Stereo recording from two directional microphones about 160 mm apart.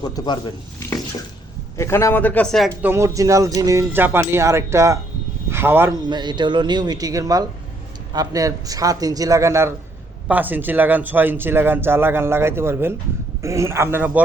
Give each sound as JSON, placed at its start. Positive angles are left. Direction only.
{"t": 0.0, "sound": "speech", "side_deg": 25}
{"t": 1.7, "sound": "speech", "side_deg": 15}
{"t": 2.8, "sound": "speech", "side_deg": -15}
{"t": 5.5, "sound": "a sound", "side_deg": -15}
{"t": 6.1, "sound": "a man's voice", "side_deg": -25}